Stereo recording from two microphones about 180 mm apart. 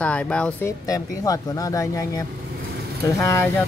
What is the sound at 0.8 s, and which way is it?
Speech, 20° left (ahead or behind).